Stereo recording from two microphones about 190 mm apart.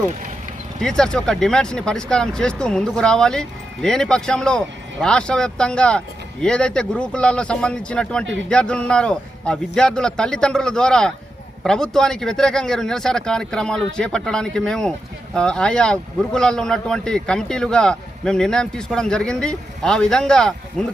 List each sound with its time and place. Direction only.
0.8 s speech: 5° left (ahead or behind)